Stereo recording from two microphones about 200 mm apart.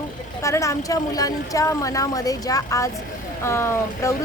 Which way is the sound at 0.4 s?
15° left (ahead or behind).